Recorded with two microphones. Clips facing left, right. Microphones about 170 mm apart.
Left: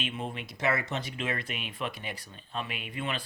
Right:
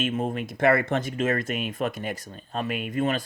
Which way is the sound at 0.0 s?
45° right (ahead or behind).